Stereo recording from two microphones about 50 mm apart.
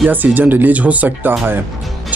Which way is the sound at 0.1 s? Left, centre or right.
Right.